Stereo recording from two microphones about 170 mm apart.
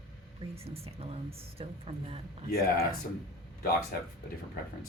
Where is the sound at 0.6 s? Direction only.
35° right (ahead or behind).